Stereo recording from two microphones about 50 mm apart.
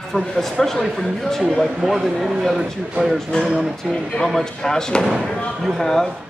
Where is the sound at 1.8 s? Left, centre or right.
Centre.